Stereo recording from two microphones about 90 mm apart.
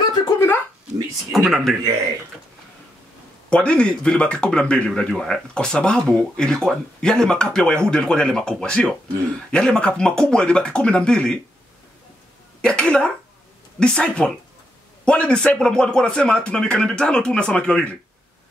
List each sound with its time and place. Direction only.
0.2 s a sound: 65° left (ahead or behind)
1.3 s speech: centre (ahead or behind)
3.4 s speech: 10° left (ahead or behind)
12.6 s speech: 10° left (ahead or behind)